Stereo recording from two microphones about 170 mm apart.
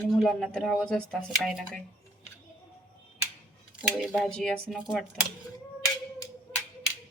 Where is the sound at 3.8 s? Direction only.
Centre (ahead or behind).